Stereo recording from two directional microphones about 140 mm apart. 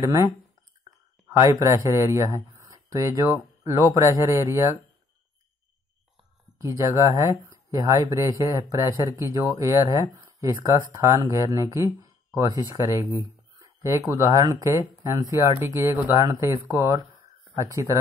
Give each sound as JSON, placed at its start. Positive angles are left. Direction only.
{"t": 0.0, "sound": "speech", "side_deg": -20}
{"t": 6.6, "sound": "speech", "side_deg": -20}